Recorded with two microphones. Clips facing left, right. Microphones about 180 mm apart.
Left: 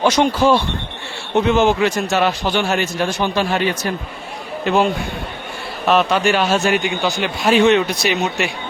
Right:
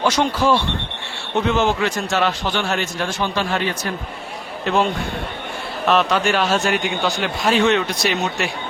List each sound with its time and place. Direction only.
0.0 s a man's voice: 20° left (ahead or behind)
4.6 s a man's voice: 5° left (ahead or behind)
5.9 s a man's voice: 5° left (ahead or behind)